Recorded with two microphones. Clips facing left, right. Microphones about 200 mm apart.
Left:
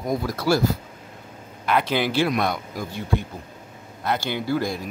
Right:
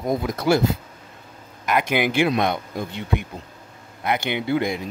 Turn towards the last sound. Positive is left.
turn(degrees=-20)  # may be behind; listen again after turning